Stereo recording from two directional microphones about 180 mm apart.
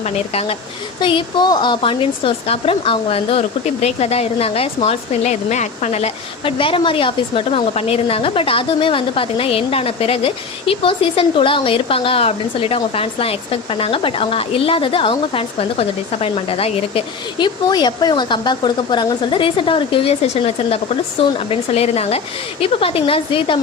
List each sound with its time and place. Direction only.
0.0 s speech: 35° left (ahead or behind)